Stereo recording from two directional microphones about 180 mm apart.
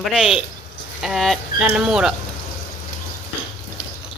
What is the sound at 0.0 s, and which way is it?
Speech, 5° right (ahead or behind).